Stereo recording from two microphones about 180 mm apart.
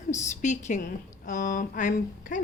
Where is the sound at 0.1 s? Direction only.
40° left (ahead or behind).